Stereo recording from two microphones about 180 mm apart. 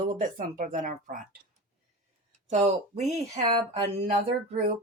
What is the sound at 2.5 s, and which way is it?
Speech, 40° right (ahead or behind).